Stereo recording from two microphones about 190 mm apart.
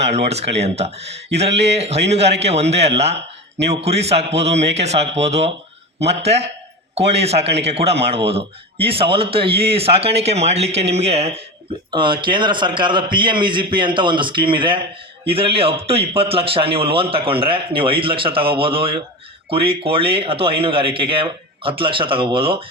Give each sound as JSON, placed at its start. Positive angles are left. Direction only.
{"t": 0.0, "sound": "a man's voice", "side_deg": -35}